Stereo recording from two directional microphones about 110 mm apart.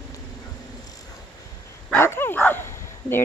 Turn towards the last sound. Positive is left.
turn(degrees=20)  # may be behind; listen again after turning